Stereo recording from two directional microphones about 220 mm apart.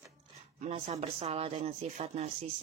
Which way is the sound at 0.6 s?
30° right (ahead or behind).